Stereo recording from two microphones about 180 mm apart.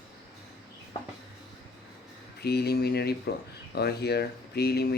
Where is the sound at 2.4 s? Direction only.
60° left (ahead or behind).